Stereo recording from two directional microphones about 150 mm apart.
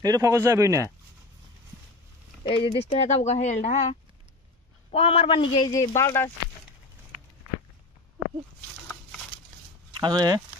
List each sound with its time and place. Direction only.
0.0 s speech: 20° right (ahead or behind)
2.4 s speech: 40° left (ahead or behind)
4.9 s a man's voice: 40° left (ahead or behind)
5.7 s speech: 20° left (ahead or behind)
9.9 s speech: 30° right (ahead or behind)